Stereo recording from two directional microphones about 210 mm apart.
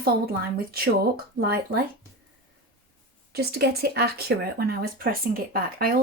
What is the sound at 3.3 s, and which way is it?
Speech, 50° right (ahead or behind).